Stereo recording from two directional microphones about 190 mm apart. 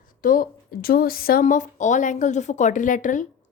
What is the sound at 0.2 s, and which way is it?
A woman's voice, 45° left (ahead or behind).